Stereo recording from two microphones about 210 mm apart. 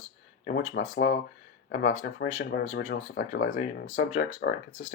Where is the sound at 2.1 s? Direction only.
50° left (ahead or behind).